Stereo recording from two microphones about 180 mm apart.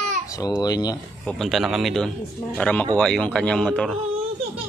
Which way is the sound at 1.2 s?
Centre (ahead or behind).